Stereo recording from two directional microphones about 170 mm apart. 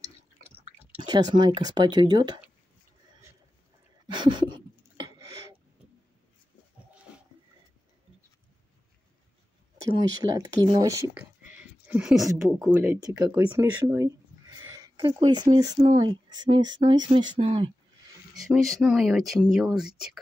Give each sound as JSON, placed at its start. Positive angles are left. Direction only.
{"t": 0.9, "sound": "speech", "side_deg": -25}
{"t": 4.1, "sound": "a sound", "side_deg": -25}
{"t": 9.8, "sound": "speech", "side_deg": -20}
{"t": 13.6, "sound": "a sound", "side_deg": -15}
{"t": 15.5, "sound": "speech", "side_deg": -25}
{"t": 18.4, "sound": "speech", "side_deg": 0}